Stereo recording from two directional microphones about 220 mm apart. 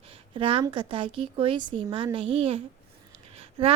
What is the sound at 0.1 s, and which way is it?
A woman's voice, 25° right (ahead or behind).